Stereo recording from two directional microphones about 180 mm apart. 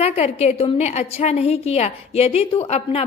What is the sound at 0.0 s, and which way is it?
A woman's voice, 35° left (ahead or behind).